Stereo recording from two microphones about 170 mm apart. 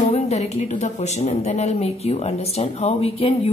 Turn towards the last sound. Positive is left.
turn(degrees=35)  # may be behind; listen again after turning